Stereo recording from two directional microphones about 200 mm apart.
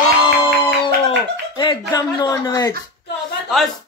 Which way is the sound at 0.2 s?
25° left (ahead or behind).